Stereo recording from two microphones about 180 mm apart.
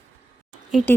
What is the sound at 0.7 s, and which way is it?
Speech, centre (ahead or behind).